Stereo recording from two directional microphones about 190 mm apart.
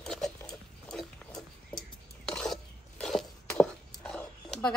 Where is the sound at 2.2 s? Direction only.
5° left (ahead or behind).